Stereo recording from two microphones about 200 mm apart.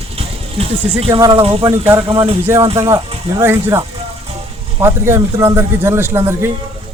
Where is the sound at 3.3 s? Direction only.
10° right (ahead or behind).